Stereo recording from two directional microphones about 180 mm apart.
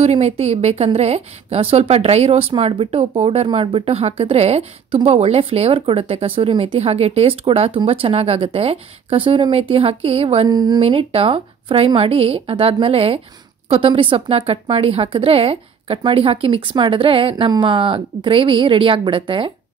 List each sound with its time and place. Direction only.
0.0 s a woman's voice: 35° right (ahead or behind)
10.8 s a woman's voice: 30° right (ahead or behind)